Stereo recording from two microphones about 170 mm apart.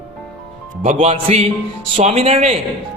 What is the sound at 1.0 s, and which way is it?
A man's voice, 35° right (ahead or behind).